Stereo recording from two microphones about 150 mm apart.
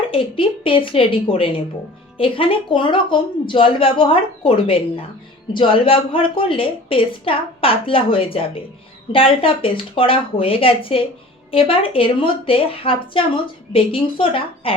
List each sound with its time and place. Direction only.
0.1 s a woman's voice: 35° left (ahead or behind)